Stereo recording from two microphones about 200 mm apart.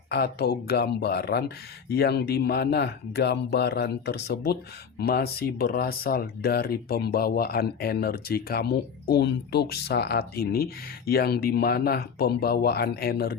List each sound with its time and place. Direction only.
0.1 s speech: 55° left (ahead or behind)